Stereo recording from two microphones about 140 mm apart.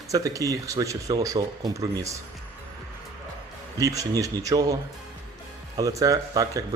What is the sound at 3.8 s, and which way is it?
Speech, 25° right (ahead or behind).